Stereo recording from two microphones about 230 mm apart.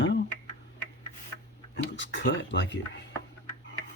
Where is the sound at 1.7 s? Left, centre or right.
Left.